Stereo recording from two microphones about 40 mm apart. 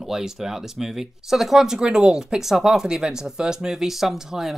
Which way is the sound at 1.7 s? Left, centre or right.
Right.